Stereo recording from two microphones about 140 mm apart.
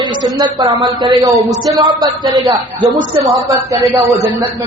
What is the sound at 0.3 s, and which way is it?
Speech, 30° right (ahead or behind).